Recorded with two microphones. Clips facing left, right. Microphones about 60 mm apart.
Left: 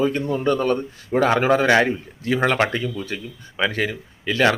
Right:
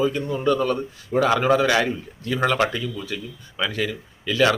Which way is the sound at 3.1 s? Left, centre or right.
Left.